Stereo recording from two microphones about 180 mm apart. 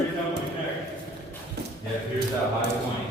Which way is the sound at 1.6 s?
60° right (ahead or behind).